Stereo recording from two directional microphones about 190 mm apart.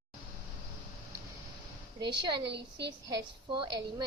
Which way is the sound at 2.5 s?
65° right (ahead or behind).